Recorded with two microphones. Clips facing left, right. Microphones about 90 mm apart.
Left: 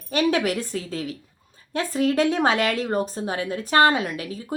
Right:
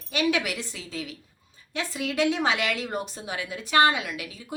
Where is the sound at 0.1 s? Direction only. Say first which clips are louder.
Left 4 dB; 40° left (ahead or behind).